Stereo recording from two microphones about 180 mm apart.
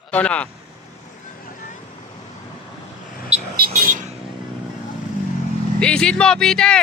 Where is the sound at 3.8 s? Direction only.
45° right (ahead or behind).